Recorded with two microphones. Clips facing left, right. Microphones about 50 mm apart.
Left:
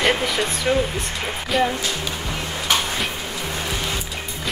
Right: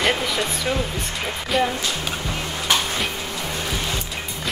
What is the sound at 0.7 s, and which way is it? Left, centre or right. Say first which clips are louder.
Speech: left 6 dB; centre.